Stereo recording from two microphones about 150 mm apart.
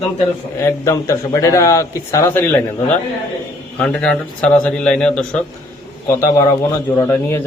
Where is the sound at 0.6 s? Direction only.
20° left (ahead or behind).